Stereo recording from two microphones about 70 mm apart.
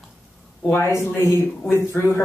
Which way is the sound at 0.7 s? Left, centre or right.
Left.